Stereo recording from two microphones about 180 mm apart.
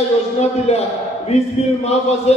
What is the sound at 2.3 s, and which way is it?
Speech, 35° left (ahead or behind).